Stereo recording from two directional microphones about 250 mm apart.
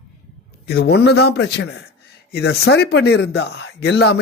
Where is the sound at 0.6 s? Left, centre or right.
Left.